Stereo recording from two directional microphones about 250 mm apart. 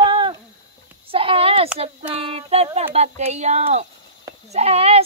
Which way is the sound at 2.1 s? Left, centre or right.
Right.